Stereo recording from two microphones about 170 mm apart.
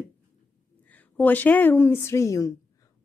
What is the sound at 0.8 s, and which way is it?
A woman's voice, 10° left (ahead or behind).